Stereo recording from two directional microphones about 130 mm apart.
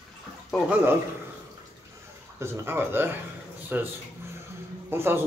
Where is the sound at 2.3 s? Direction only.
20° right (ahead or behind).